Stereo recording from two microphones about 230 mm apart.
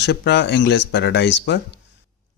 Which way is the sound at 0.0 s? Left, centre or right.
Left.